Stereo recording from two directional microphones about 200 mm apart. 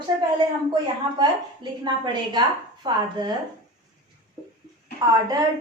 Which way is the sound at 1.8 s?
20° right (ahead or behind).